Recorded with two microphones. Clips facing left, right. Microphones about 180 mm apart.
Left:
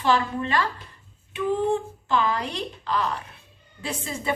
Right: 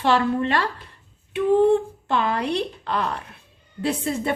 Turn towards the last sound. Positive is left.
turn(degrees=-60)  # may be behind; listen again after turning